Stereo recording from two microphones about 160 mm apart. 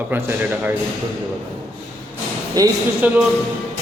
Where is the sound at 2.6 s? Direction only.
25° right (ahead or behind).